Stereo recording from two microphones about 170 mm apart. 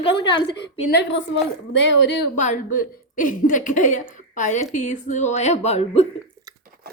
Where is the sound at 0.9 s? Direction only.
90° left.